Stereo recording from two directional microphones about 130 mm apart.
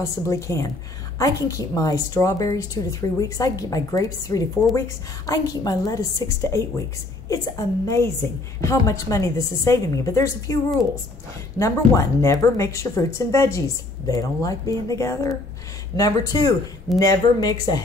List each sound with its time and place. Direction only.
0.0 s speech: 25° left (ahead or behind)